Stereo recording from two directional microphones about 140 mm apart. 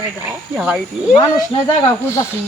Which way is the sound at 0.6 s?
Centre (ahead or behind).